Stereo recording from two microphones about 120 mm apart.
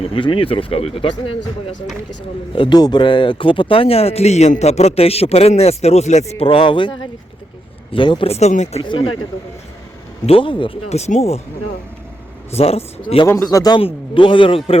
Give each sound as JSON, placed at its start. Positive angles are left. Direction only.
{"t": 0.1, "sound": "speech", "side_deg": 45}
{"t": 2.6, "sound": "speech", "side_deg": 35}
{"t": 8.3, "sound": "speech", "side_deg": 70}
{"t": 8.8, "sound": "speech", "side_deg": 40}
{"t": 10.2, "sound": "speech", "side_deg": 45}
{"t": 10.8, "sound": "speech", "side_deg": 65}
{"t": 12.5, "sound": "speech", "side_deg": 60}
{"t": 13.2, "sound": "speech", "side_deg": 25}
{"t": 13.7, "sound": "speech", "side_deg": 50}